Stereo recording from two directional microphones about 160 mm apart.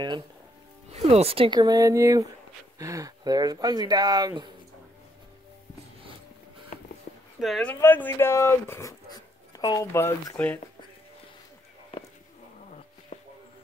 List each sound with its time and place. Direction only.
0.9 s speech: 40° right (ahead or behind); by 4.5 s 25° right (ahead or behind)
6.7 s a sound: 50° left (ahead or behind)
7.3 s speech: centre (ahead or behind)
7.7 s speech: 15° left (ahead or behind)